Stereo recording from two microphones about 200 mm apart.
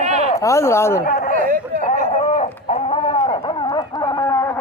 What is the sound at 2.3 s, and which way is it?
Chicken, 30° left (ahead or behind).